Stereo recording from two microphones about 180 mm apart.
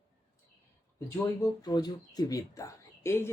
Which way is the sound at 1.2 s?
20° left (ahead or behind).